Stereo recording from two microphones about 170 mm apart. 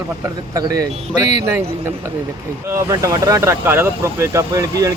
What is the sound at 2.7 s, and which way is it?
Speech, 15° right (ahead or behind).